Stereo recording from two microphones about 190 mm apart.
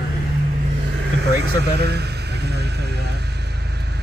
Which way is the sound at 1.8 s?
60° right (ahead or behind).